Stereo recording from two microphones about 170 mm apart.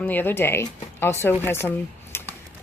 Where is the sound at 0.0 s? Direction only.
10° left (ahead or behind).